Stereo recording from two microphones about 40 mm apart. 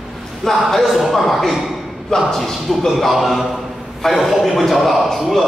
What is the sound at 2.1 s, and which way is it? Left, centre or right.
Speech, centre.